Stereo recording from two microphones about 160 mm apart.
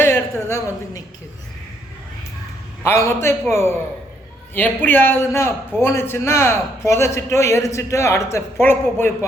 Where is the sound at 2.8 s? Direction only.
15° left (ahead or behind).